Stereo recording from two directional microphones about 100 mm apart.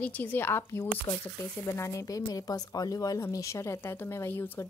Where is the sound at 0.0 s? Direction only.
15° left (ahead or behind).